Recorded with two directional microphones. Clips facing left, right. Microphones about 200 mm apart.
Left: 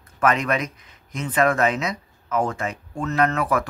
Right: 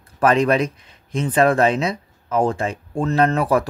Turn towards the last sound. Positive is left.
turn(degrees=-30)  # may be behind; listen again after turning